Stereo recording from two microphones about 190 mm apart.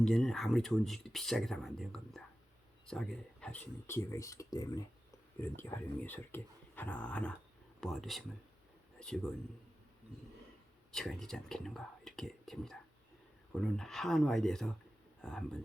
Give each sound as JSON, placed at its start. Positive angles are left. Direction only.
{"t": 0.0, "sound": "speech", "side_deg": 0}
{"t": 10.9, "sound": "speech", "side_deg": 5}